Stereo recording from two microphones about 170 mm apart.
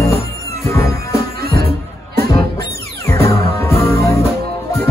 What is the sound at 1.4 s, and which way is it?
Music, 65° right (ahead or behind).